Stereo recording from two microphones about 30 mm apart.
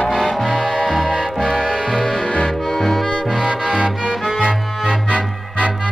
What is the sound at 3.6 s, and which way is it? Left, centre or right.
Music, right.